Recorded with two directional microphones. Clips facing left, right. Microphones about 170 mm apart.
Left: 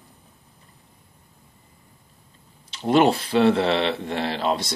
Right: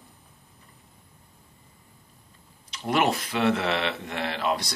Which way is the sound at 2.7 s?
30° left (ahead or behind).